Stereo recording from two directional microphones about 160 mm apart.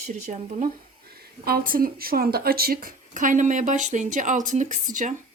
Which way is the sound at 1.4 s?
65° right (ahead or behind).